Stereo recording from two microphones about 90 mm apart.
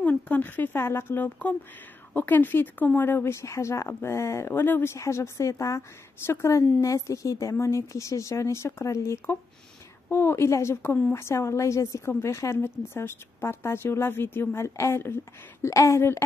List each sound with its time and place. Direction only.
0.0 s a woman's voice: 20° left (ahead or behind)
11.1 s a woman's voice: 30° left (ahead or behind)